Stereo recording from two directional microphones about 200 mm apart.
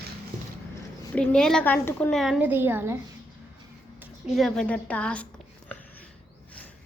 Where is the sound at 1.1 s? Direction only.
5° left (ahead or behind).